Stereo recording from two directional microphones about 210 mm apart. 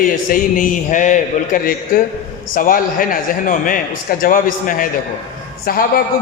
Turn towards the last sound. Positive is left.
turn(degrees=45)  # may be behind; listen again after turning